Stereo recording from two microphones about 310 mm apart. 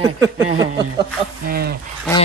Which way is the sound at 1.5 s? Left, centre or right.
Right.